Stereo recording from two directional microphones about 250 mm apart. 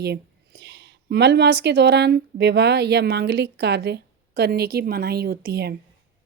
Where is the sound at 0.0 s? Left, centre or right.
Right.